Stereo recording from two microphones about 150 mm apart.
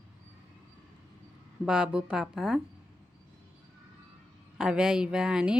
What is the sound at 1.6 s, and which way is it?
Speech, 5° right (ahead or behind).